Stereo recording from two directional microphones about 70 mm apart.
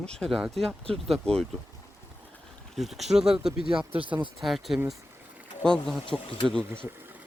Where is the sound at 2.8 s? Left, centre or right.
Centre.